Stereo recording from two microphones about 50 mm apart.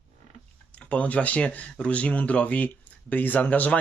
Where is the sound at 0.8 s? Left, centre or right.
Left.